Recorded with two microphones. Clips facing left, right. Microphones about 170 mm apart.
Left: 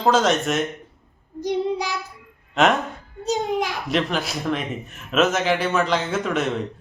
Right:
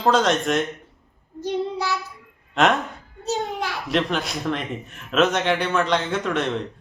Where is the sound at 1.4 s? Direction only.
15° left (ahead or behind).